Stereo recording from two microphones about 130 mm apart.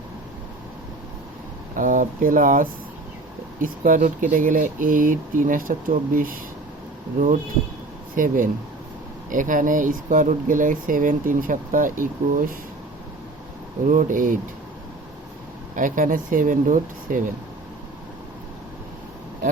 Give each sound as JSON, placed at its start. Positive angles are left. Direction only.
{"t": 1.7, "sound": "speech", "side_deg": -90}
{"t": 8.1, "sound": "speech", "side_deg": -90}
{"t": 13.8, "sound": "speech", "side_deg": -90}
{"t": 15.7, "sound": "speech", "side_deg": -90}